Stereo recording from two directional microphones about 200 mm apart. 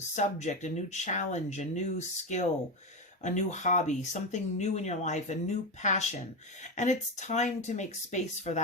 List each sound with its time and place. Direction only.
0.2 s speech: 35° left (ahead or behind)